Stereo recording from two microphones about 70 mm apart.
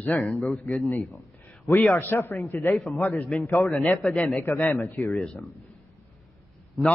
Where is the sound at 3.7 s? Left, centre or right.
Centre.